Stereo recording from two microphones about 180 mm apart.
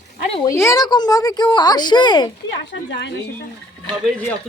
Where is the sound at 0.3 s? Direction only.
15° left (ahead or behind).